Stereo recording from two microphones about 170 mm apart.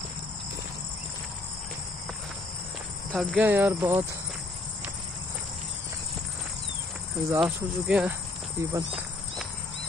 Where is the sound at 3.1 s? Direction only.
5° right (ahead or behind).